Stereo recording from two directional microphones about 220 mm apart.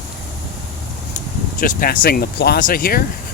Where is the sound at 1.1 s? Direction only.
35° left (ahead or behind).